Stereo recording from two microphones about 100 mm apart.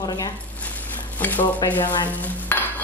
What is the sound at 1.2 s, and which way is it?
Stir, 15° left (ahead or behind).